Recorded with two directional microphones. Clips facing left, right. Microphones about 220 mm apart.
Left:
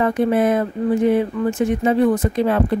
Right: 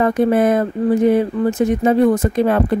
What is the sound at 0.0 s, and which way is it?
Speech, 45° right (ahead or behind).